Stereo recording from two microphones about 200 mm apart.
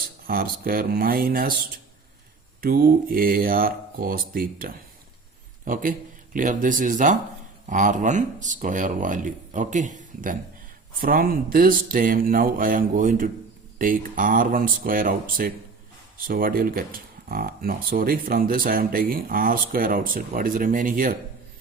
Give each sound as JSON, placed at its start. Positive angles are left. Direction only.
{"t": 0.3, "sound": "speech", "side_deg": -45}
{"t": 2.6, "sound": "speech", "side_deg": -45}